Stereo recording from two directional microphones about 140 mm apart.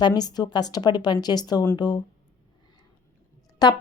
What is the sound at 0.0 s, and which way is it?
A woman's voice, 30° left (ahead or behind).